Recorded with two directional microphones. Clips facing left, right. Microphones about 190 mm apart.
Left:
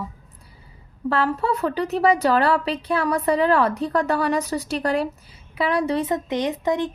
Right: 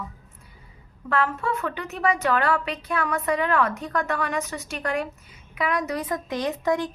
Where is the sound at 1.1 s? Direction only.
35° left (ahead or behind).